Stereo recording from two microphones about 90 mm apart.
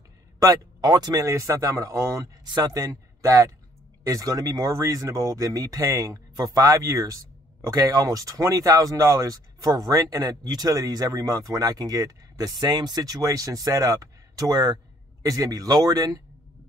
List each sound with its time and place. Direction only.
0.4 s speech: 45° right (ahead or behind)
1.2 s speech: 30° right (ahead or behind)
2.4 s a man's voice: 50° right (ahead or behind)